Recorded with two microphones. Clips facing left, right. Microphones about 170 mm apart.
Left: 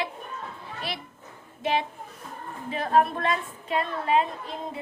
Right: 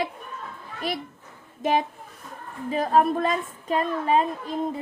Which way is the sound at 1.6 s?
45° right (ahead or behind).